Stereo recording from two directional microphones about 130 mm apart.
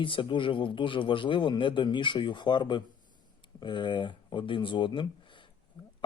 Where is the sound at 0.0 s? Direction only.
40° left (ahead or behind).